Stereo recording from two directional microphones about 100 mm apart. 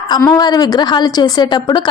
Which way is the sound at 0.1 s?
45° left (ahead or behind).